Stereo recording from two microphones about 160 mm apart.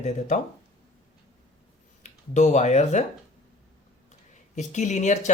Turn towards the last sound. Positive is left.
turn(degrees=45)  # may be behind; listen again after turning